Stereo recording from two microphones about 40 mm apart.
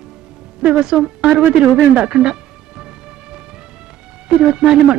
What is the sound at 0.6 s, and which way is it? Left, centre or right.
Speech, right.